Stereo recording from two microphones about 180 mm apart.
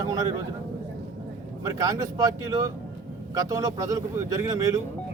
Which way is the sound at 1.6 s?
20° right (ahead or behind).